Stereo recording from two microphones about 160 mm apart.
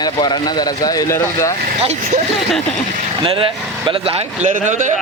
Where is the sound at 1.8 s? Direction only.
45° right (ahead or behind).